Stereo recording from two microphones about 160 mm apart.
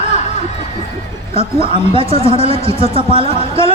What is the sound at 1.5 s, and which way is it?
Speech, 30° right (ahead or behind).